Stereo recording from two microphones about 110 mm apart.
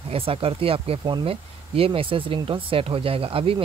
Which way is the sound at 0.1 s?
55° right (ahead or behind).